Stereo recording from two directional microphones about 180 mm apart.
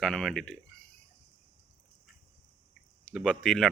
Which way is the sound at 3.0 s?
5° left (ahead or behind).